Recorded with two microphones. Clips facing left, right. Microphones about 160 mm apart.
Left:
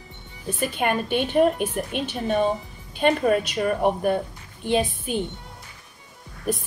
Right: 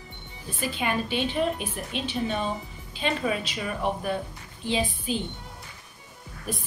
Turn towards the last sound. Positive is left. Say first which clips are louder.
# left 8 dB
turn(degrees=50)  # may be behind; listen again after turning